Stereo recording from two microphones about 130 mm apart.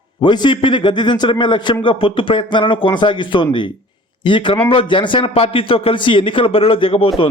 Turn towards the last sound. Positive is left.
turn(degrees=45)  # may be behind; listen again after turning